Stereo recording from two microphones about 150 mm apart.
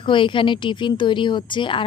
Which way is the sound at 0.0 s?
35° left (ahead or behind).